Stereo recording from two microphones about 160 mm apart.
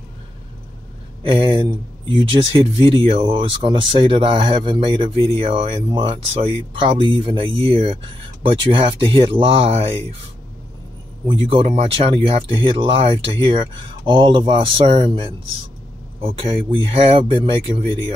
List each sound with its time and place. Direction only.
1.2 s speech: 35° right (ahead or behind)
11.2 s speech: 35° right (ahead or behind)